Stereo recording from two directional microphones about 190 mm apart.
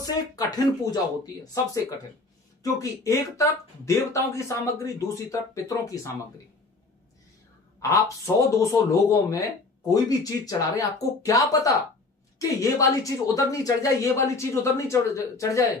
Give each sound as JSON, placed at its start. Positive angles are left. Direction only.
{"t": 0.0, "sound": "speech", "side_deg": 20}
{"t": 7.8, "sound": "speech", "side_deg": 15}